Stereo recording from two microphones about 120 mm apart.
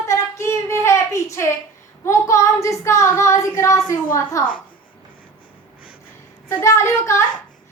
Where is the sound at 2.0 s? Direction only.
25° left (ahead or behind).